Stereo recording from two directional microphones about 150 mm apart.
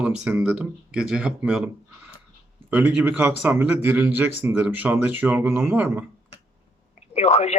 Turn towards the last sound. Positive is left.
turn(degrees=45)  # may be behind; listen again after turning